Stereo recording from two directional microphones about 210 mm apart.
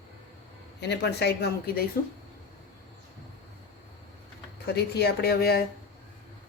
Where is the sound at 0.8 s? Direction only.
55° left (ahead or behind).